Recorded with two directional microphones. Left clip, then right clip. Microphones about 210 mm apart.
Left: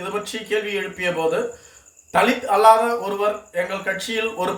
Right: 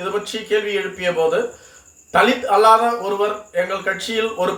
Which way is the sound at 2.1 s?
5° left (ahead or behind).